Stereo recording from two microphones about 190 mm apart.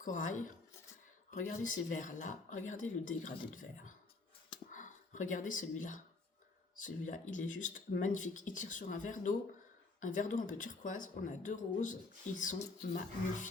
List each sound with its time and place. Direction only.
0.0 s speech: 45° left (ahead or behind)